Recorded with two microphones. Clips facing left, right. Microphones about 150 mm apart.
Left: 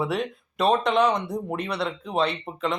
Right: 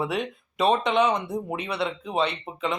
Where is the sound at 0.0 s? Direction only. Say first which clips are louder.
Left 1 dB; centre (ahead or behind).